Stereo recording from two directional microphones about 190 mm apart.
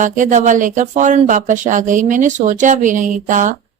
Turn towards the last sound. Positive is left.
turn(degrees=-40)  # may be behind; listen again after turning